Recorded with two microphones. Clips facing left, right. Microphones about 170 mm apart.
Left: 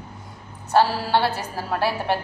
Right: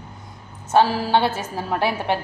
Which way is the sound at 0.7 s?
20° right (ahead or behind).